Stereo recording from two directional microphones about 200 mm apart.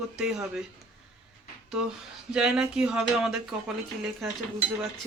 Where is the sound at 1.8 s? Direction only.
5° right (ahead or behind).